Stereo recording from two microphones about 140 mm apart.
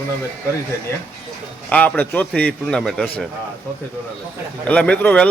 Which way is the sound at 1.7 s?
10° left (ahead or behind).